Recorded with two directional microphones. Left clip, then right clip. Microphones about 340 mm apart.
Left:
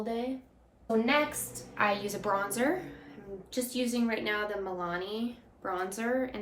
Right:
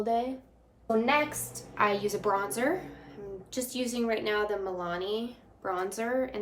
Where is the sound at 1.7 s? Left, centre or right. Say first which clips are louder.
Right 2 dB; centre.